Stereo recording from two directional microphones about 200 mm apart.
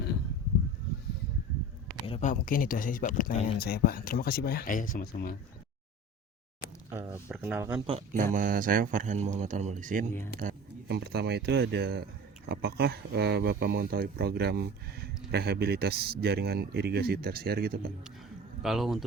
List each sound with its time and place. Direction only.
2.0 s a sound: 30° left (ahead or behind)
2.3 s speech: 45° left (ahead or behind)
6.9 s speech: 10° right (ahead or behind)
7.7 s speech: 25° right (ahead or behind)
8.1 s speech: 40° right (ahead or behind)
10.4 s speech: 55° right (ahead or behind)
18.6 s speech: centre (ahead or behind)